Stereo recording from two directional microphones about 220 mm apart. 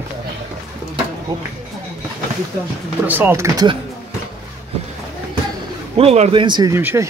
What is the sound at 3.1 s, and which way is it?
Speech, 10° right (ahead or behind).